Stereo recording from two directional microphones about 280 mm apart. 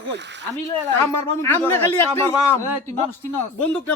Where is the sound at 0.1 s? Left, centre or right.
Right.